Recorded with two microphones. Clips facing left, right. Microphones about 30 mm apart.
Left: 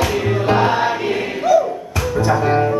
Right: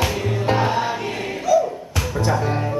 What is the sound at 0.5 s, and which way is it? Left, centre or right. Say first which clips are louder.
Choir: left 4 dB; left.